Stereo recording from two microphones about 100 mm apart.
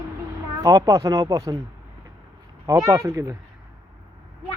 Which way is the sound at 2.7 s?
30° right (ahead or behind).